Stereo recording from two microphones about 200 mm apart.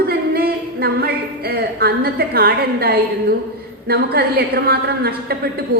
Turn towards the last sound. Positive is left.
turn(degrees=-50)  # may be behind; listen again after turning